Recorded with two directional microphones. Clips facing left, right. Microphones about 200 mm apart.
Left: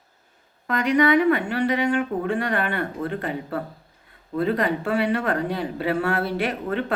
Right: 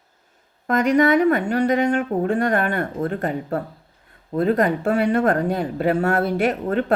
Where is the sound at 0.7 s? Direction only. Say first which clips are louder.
Right 3 dB; 45° right (ahead or behind).